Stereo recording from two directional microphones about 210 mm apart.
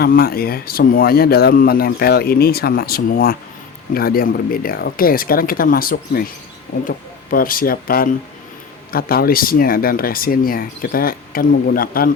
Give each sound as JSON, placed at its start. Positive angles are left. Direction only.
{"t": 0.0, "sound": "a man's voice", "side_deg": 45}